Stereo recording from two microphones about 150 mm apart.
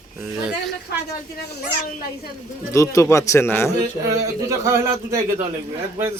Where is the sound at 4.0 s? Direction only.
20° right (ahead or behind).